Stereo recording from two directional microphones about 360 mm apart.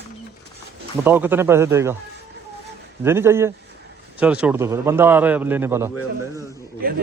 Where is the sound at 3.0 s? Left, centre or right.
Centre.